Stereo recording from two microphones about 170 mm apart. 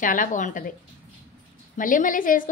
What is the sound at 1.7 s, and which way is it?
Speech, 50° left (ahead or behind).